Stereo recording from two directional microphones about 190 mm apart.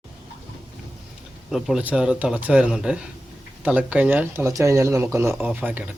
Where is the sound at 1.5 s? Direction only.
Centre (ahead or behind).